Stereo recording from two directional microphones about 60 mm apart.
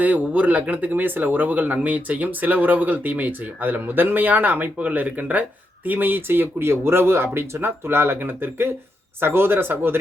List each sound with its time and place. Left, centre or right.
0.0 s speech: right